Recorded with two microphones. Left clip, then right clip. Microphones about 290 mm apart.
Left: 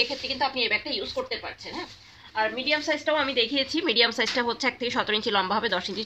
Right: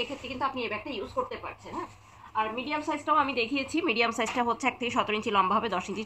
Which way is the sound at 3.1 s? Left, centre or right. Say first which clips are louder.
Even; left.